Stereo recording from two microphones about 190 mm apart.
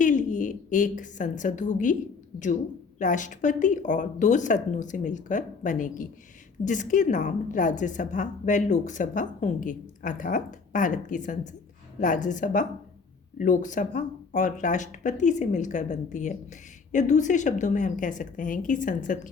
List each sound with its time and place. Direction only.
0.0 s a woman's voice: 40° left (ahead or behind)
3.0 s a woman's voice: 40° left (ahead or behind)